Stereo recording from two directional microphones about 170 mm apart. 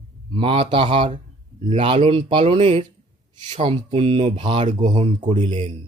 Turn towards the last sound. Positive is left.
turn(degrees=-35)  # may be behind; listen again after turning